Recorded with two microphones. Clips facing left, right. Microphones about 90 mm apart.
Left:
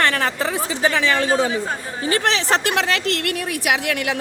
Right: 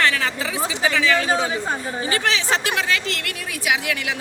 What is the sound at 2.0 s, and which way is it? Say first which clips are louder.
A woman's voice: left 3 dB; 60° left (ahead or behind).